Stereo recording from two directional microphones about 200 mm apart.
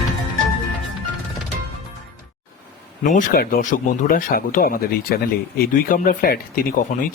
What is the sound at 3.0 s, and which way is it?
Speech, 45° left (ahead or behind).